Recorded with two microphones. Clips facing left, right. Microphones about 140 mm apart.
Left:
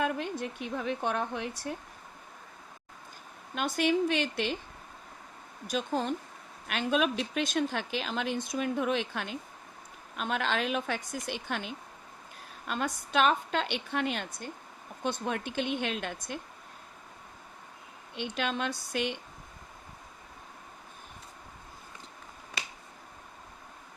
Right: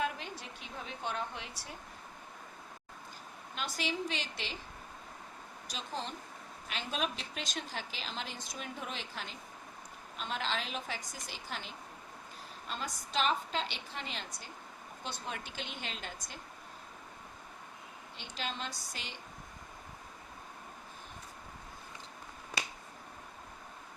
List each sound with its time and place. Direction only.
0.0 s speech: 55° left (ahead or behind)
3.5 s speech: 55° left (ahead or behind)
5.6 s speech: 55° left (ahead or behind)
18.2 s speech: 60° left (ahead or behind)